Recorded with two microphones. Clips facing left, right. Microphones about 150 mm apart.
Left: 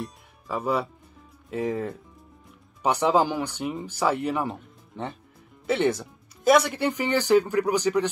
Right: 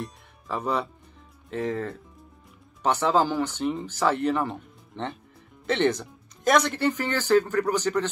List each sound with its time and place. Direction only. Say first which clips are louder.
0.0 s music: even; 5° left (ahead or behind)
1.6 s speech: left 1 dB; 20° left (ahead or behind)